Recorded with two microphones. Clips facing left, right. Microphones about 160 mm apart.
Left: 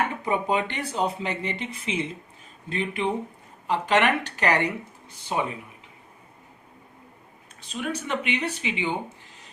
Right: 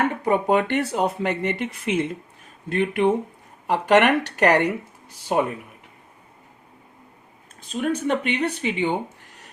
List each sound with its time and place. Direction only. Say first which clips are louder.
0.3 s speech: right 7 dB; 55° right (ahead or behind)
7.7 s speech: right 6 dB; 45° right (ahead or behind); by 9.0 s 60° right (ahead or behind)